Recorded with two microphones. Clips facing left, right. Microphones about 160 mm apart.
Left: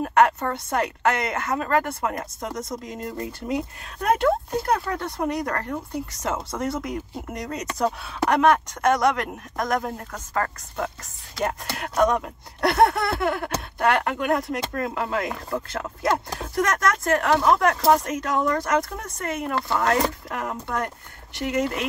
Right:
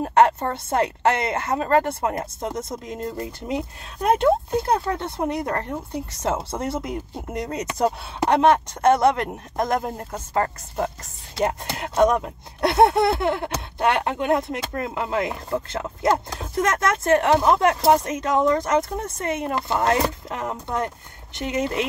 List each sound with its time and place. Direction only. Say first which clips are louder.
0.0 s speech: right 2 dB; 30° right (ahead or behind)